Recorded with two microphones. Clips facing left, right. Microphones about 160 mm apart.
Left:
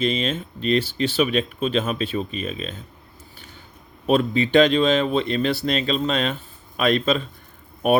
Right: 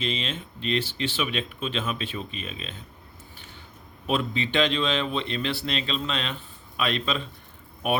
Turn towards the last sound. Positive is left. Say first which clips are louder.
# left 8 dB
turn(degrees=45)  # may be behind; listen again after turning